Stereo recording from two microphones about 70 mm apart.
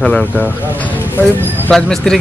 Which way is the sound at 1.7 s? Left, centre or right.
Centre.